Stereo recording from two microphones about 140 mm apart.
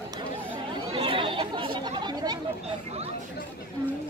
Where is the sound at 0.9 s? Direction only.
40° right (ahead or behind).